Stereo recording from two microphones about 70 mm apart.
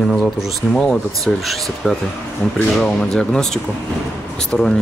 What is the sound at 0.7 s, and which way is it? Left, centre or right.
Speech, centre.